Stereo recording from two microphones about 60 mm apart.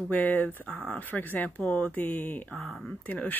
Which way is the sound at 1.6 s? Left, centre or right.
Centre.